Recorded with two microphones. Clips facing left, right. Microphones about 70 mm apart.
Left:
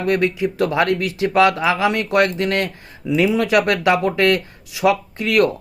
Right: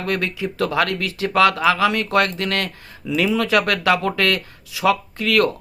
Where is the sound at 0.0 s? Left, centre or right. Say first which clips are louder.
Left 5 dB; left.